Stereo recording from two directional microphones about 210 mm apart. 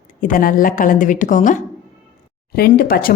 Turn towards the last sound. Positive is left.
turn(degrees=45)  # may be behind; listen again after turning